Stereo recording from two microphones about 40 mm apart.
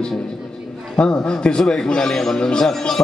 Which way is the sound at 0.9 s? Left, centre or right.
Left.